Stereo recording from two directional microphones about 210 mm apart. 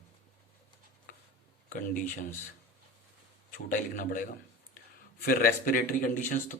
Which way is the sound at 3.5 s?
40° left (ahead or behind).